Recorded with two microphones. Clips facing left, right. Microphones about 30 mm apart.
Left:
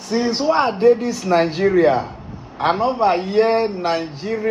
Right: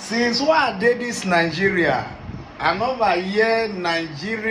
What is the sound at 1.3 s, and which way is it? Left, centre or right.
Speech, centre.